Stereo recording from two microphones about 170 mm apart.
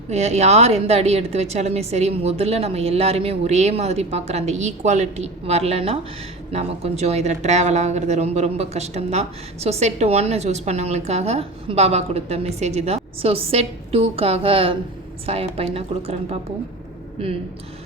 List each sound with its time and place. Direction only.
0.1 s speech: 40° right (ahead or behind)